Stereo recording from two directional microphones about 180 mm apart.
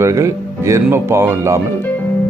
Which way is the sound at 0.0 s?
15° right (ahead or behind).